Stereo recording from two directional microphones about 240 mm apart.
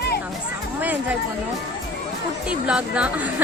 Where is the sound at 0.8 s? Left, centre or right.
Centre.